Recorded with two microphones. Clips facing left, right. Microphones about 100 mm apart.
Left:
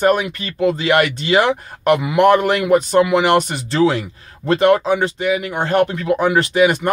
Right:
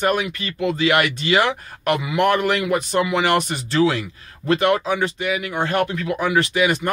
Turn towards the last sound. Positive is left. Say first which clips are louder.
# left 5 dB
turn(degrees=35)  # may be behind; listen again after turning